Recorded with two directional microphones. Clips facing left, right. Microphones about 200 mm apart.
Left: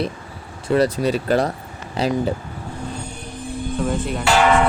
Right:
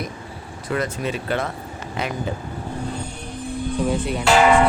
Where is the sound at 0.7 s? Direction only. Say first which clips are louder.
Left 7 dB; 35° left (ahead or behind).